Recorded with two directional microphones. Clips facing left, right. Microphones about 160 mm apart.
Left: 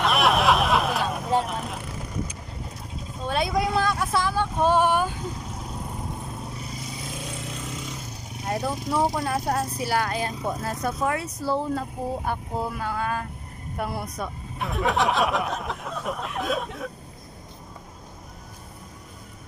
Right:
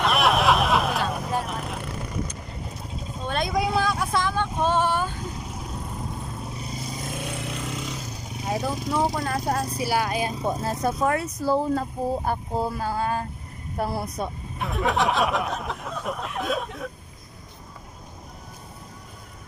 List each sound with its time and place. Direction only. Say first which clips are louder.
0.0 s vehicle: even; centre (ahead or behind)
3.3 s vehicle: left 1 dB; 5° left (ahead or behind)
6.9 s vehicle: right 5 dB; 50° right (ahead or behind); by 8.1 s 85° right
8.5 s speech: even; centre (ahead or behind)
9.8 s speech: right 2 dB; 10° right (ahead or behind)
10.4 s speech: right 3 dB; 25° right (ahead or behind)
14.6 s speech: even; centre (ahead or behind)